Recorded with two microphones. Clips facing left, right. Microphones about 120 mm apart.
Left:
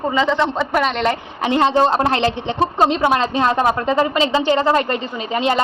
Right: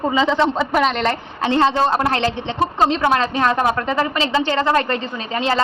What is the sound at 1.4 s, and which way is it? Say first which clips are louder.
A woman's voice: left 1 dB; 15° left (ahead or behind).